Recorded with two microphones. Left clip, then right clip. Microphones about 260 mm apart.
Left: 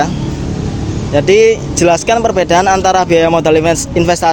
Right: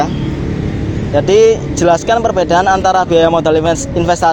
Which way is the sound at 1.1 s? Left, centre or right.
Left.